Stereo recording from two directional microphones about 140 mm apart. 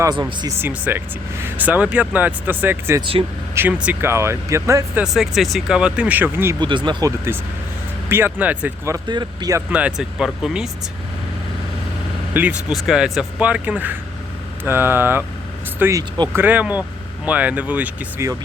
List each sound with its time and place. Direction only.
0.0 s speech: 30° right (ahead or behind)
0.6 s speech: 15° right (ahead or behind)
3.0 s speech: 40° right (ahead or behind)
3.5 s speech: 15° right (ahead or behind)
5.0 s speech: centre (ahead or behind)
6.6 s speech: 35° right (ahead or behind)
8.1 s speech: 15° right (ahead or behind)
9.0 s speech: 30° right (ahead or behind)
9.7 s speech: 5° right (ahead or behind)
12.3 s speech: 10° right (ahead or behind); by 16.3 s 30° right (ahead or behind)
16.3 s speech: 10° right (ahead or behind)